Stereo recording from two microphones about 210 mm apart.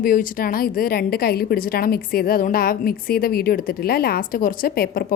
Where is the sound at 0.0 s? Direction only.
40° left (ahead or behind).